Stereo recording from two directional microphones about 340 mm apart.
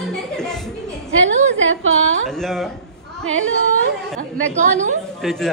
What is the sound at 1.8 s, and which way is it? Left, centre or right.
Speech, right.